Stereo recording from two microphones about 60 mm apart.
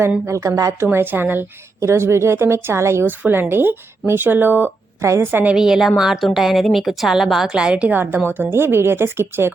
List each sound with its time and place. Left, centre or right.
0.3 s a woman's voice: right
0.8 s a woman's voice: right
1.8 s a woman's voice: right
3.1 s a woman's voice: right
5.5 s a woman's voice: centre
7.9 s a woman's voice: right